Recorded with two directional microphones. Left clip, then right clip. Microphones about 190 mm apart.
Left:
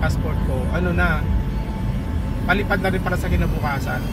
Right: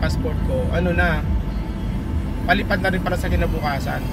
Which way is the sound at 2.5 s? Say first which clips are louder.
Right 1 dB; 25° right (ahead or behind).